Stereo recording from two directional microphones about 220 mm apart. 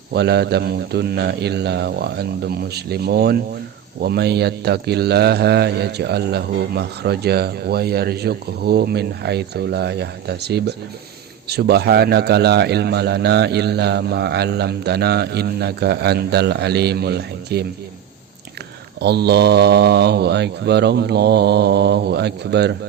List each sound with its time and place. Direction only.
0.1 s a man's voice: 50° right (ahead or behind)
18.9 s a man's voice: 50° right (ahead or behind)